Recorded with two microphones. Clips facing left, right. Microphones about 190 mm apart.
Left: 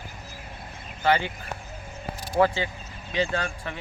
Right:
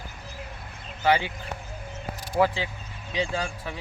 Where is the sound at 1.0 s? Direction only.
10° right (ahead or behind).